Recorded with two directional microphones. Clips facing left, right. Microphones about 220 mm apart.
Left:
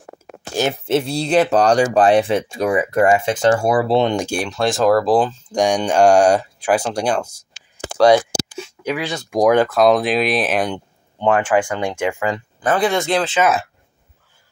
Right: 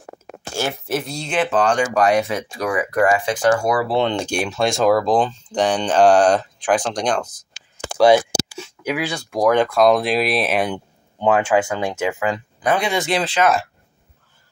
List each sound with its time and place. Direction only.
0.6 s speech: 25° left (ahead or behind)
4.3 s speech: centre (ahead or behind)
8.0 s a sound: 5° right (ahead or behind)
9.3 s speech: 10° left (ahead or behind)